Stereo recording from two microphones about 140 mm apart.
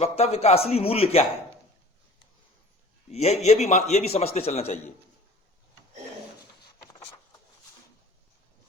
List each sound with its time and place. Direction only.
0.0 s a man's voice: 45° left (ahead or behind)
3.1 s a man's voice: 50° left (ahead or behind)